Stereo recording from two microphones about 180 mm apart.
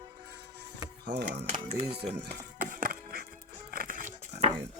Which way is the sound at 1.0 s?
65° right (ahead or behind).